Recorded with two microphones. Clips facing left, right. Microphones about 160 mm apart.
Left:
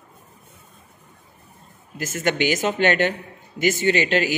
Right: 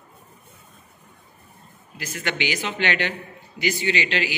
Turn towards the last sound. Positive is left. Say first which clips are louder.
# left 5 dB
turn(degrees=45)  # may be behind; listen again after turning